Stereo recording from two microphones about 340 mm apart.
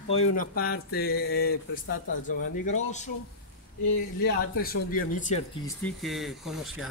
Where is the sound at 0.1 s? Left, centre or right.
Left.